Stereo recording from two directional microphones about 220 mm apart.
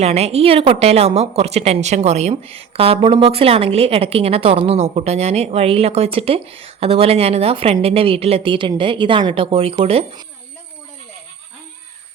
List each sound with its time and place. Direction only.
0.0 s a woman's voice: 30° right (ahead or behind)